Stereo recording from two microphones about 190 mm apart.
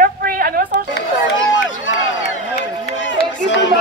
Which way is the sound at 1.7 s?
90° left.